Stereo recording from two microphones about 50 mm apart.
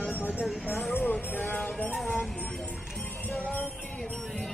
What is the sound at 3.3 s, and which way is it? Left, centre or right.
Music, left.